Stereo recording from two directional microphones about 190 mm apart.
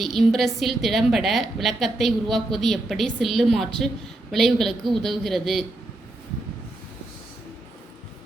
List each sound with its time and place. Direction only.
0.0 s a woman's voice: centre (ahead or behind)